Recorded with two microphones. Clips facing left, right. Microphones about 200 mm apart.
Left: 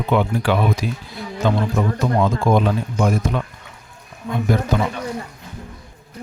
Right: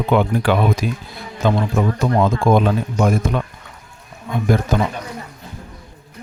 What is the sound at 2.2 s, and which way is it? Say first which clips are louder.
Speech: right 2 dB; 50° right (ahead or behind).